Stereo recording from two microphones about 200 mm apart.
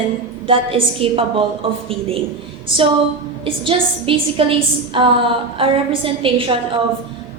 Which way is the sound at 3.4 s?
25° right (ahead or behind).